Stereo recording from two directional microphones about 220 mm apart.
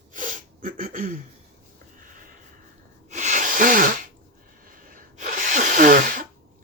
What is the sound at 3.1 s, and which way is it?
Wheeze, 35° right (ahead or behind).